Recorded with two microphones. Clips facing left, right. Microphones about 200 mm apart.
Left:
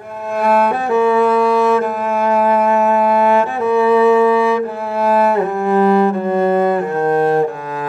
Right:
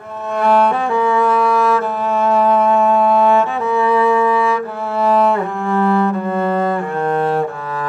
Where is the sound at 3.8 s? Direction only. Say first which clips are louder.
Left 4 dB; 25° left (ahead or behind).